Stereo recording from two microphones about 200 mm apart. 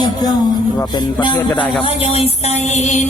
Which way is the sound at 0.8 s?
20° left (ahead or behind).